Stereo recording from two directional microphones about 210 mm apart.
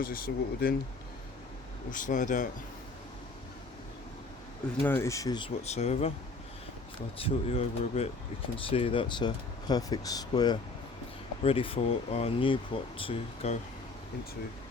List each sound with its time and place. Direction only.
0.0 s speech: 45° left (ahead or behind)
1.9 s speech: 40° left (ahead or behind)
4.8 s speech: 10° left (ahead or behind)
5.6 s speech: 30° left (ahead or behind)
7.2 s speech: 25° left (ahead or behind)